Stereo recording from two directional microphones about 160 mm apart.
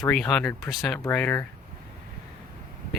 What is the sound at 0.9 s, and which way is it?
Speech, 10° left (ahead or behind).